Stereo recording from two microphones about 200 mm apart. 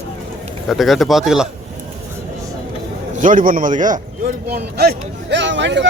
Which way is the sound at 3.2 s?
40° right (ahead or behind).